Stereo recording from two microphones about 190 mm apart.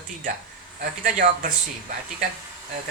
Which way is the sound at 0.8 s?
45° right (ahead or behind).